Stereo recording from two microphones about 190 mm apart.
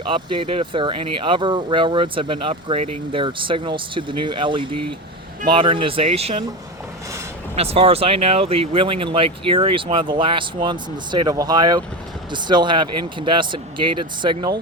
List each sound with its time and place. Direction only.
0.0 s speech: 25° right (ahead or behind)
7.5 s speech: 30° right (ahead or behind)